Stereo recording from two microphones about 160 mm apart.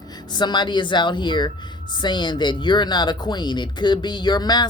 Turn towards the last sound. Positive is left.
turn(degrees=25)  # may be behind; listen again after turning